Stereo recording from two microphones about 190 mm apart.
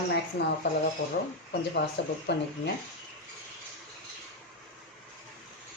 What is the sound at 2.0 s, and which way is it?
Speech, 65° left (ahead or behind).